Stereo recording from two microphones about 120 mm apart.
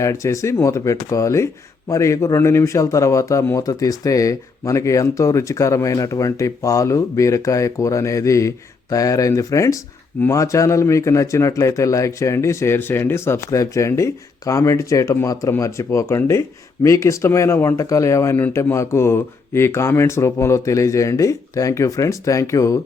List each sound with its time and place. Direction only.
0.0 s a man's voice: 25° left (ahead or behind)